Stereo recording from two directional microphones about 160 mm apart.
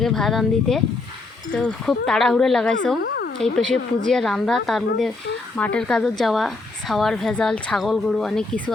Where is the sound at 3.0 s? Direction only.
90° left.